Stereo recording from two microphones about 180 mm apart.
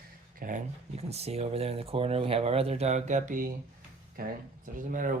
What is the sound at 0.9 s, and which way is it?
Speech, 35° right (ahead or behind).